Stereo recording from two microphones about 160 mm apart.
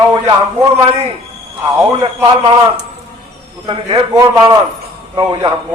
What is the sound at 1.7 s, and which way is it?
Speech, 20° right (ahead or behind).